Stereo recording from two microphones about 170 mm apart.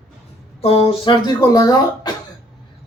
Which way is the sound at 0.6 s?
35° left (ahead or behind).